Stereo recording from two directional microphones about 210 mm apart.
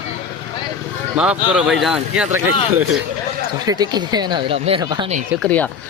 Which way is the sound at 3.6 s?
20° right (ahead or behind).